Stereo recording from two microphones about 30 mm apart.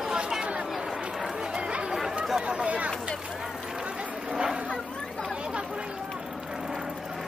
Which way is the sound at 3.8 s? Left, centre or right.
Right.